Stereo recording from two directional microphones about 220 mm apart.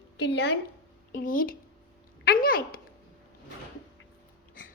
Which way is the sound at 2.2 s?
45° left (ahead or behind).